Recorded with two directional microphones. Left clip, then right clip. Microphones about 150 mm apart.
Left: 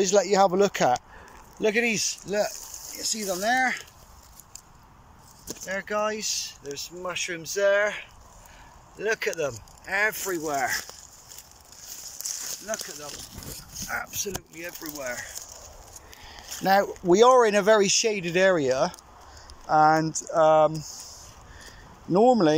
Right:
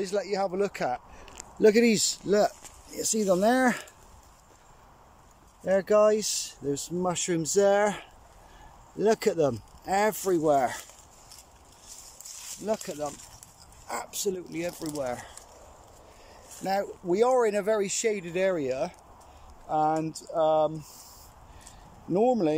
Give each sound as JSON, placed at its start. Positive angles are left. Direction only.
{"t": 0.0, "sound": "speech", "side_deg": -5}
{"t": 1.6, "sound": "speech", "side_deg": -40}
{"t": 5.7, "sound": "speech", "side_deg": -45}
{"t": 12.6, "sound": "speech", "side_deg": -30}
{"t": 17.1, "sound": "speech", "side_deg": -10}
{"t": 20.3, "sound": "speech", "side_deg": 20}
{"t": 22.1, "sound": "speech", "side_deg": -15}